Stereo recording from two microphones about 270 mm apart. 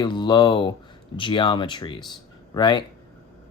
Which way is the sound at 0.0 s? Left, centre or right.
Centre.